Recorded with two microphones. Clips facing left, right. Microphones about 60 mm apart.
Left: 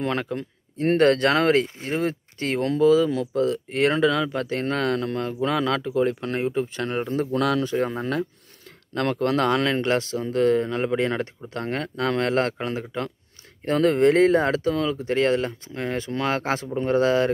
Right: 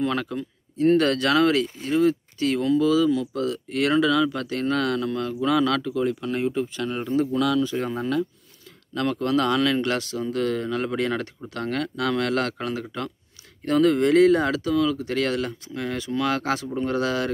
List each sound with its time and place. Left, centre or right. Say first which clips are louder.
0.0 s speech: right 1 dB; left
0.4 s speech: right 4 dB; left
7.3 s speech: left 1 dB; left